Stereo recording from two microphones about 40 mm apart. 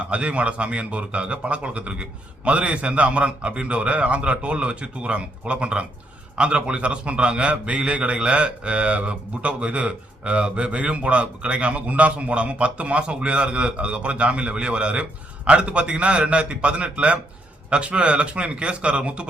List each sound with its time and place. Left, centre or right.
0.0 s a man's voice: right